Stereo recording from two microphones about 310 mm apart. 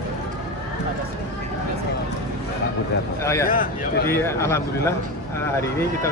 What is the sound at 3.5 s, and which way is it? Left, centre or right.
Speech, left.